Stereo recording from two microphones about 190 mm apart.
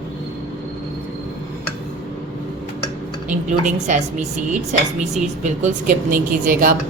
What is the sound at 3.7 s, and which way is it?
Speech, 40° right (ahead or behind).